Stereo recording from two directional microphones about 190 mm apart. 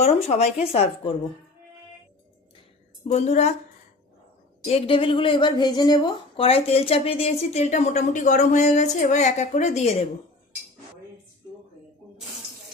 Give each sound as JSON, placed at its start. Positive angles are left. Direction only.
{"t": 0.0, "sound": "speech", "side_deg": 35}
{"t": 3.1, "sound": "speech", "side_deg": 35}
{"t": 4.6, "sound": "speech", "side_deg": 30}